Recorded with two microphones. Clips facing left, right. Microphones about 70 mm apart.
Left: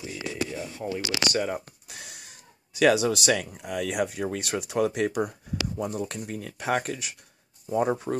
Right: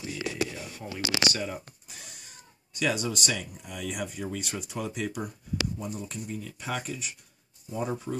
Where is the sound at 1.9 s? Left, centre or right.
Left.